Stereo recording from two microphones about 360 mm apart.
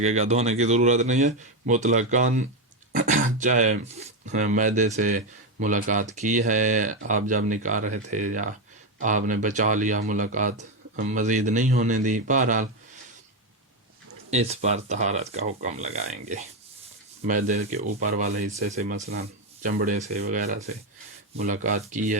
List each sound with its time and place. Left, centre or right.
0.0 s speech: centre
14.3 s speech: centre